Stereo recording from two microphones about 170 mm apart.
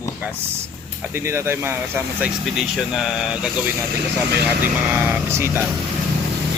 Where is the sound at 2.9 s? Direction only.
Centre (ahead or behind).